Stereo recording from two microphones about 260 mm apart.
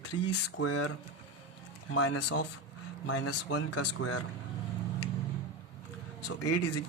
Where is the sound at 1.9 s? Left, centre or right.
Left.